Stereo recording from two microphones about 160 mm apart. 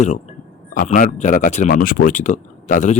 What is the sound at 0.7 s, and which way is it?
Speech, 60° left (ahead or behind).